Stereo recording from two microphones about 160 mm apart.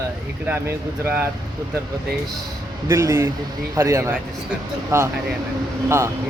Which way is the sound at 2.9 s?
15° right (ahead or behind).